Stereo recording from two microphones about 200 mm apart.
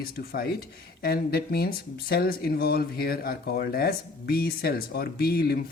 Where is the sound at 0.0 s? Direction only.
50° left (ahead or behind).